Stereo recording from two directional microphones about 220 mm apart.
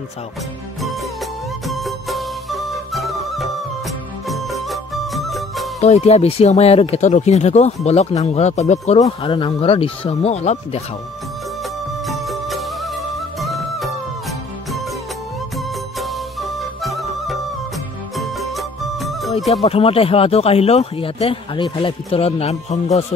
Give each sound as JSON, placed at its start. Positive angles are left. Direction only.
{"t": 1.7, "sound": "music", "side_deg": 0}
{"t": 5.8, "sound": "speech", "side_deg": 30}
{"t": 12.1, "sound": "music", "side_deg": 0}
{"t": 15.5, "sound": "music", "side_deg": 0}
{"t": 19.5, "sound": "speech", "side_deg": 25}